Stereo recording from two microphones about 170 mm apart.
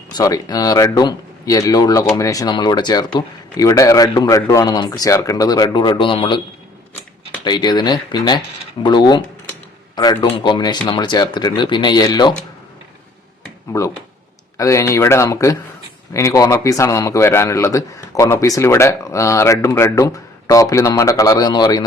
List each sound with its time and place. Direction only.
0.1 s a man's voice: 25° left (ahead or behind)
7.4 s a man's voice: 25° left (ahead or behind)
13.7 s a man's voice: 20° left (ahead or behind)